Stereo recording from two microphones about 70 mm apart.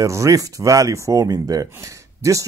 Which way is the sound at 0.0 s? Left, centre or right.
Right.